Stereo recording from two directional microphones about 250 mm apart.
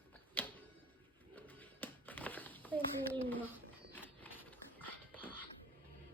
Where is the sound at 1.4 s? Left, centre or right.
Centre.